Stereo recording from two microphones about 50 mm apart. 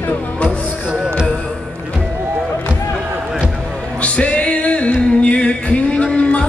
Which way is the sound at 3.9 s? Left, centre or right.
Left.